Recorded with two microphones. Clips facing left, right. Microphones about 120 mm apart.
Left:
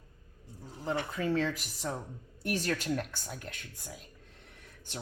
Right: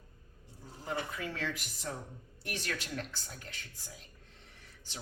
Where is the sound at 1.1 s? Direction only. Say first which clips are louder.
Left 8 dB; 35° left (ahead or behind).